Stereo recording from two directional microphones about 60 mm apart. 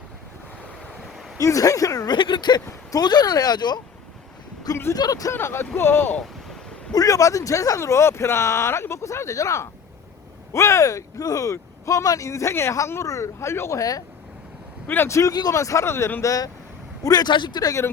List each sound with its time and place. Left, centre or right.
1.0 s a sound: centre
1.4 s speech: left
2.9 s speech: left
4.9 s speech: left
5.3 s speech: left
6.9 s speech: left
7.8 s speech: left
11.9 s speech: left
14.8 s speech: left
15.1 s speech: left
15.5 s speech: left
16.2 s speech: left
17.0 s speech: left